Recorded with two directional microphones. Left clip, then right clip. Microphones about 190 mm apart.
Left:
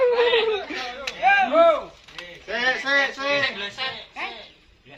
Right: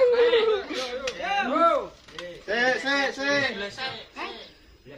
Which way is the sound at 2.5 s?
15° right (ahead or behind).